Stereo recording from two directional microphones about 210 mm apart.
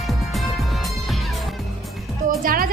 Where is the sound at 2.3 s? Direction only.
45° right (ahead or behind).